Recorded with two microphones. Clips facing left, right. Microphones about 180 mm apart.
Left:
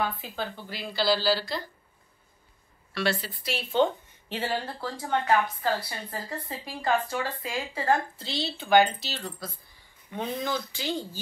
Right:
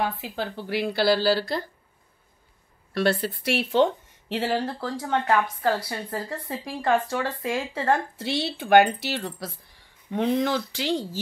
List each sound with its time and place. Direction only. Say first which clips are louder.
0.0 s speech: right 3 dB; 75° right (ahead or behind); by 1.6 s 55° right (ahead or behind)
2.9 s a woman's voice: right 5 dB; 50° right (ahead or behind)
3.4 s speech: right 3 dB; 80° right; by 5.8 s 55° right (ahead or behind)
6.6 s speech: right 4 dB; 75° right (ahead or behind)